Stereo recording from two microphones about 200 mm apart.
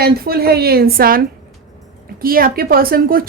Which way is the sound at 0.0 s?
50° right (ahead or behind).